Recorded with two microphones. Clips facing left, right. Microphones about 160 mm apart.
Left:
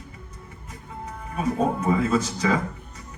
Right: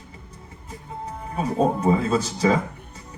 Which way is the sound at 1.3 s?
30° right (ahead or behind).